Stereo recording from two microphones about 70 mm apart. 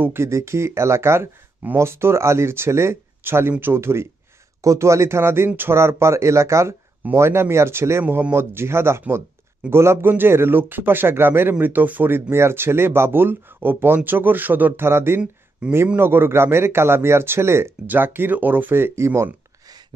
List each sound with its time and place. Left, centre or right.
0.0 s speech: right
4.6 s speech: right
15.6 s a man's voice: centre
16.0 s speech: right